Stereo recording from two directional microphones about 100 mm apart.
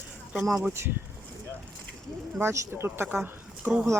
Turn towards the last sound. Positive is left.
turn(degrees=-10)  # may be behind; listen again after turning